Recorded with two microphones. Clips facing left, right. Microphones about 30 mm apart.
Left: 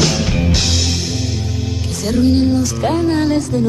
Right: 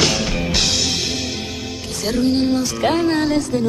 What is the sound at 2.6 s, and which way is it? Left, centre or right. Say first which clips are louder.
Music: left 1 dB; right.